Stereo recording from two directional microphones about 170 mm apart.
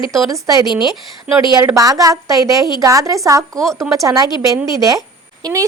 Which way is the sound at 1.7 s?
20° right (ahead or behind).